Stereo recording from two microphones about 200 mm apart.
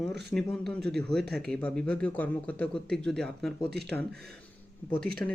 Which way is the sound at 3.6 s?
55° right (ahead or behind).